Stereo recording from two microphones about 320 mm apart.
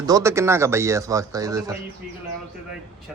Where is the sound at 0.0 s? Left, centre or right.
Centre.